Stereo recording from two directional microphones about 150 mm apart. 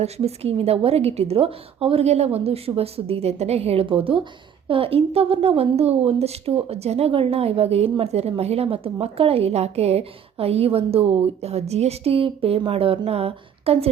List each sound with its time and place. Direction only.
0.0 s a woman's voice: 40° right (ahead or behind)